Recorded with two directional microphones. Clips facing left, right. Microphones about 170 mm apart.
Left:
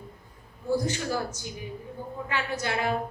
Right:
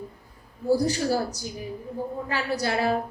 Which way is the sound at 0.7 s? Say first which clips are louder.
Right 5 dB; 35° right (ahead or behind).